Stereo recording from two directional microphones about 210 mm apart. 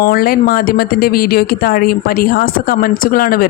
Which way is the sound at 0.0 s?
45° left (ahead or behind).